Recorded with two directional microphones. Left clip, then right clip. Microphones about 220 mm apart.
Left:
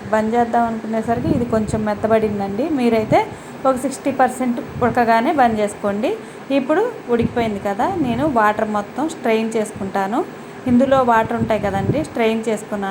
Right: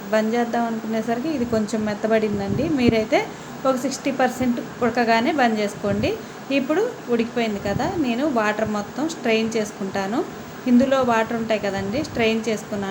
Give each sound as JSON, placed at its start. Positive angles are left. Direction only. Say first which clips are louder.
{"t": 0.1, "sound": "a woman's voice", "louder": "left 4 dB", "side_deg": 0}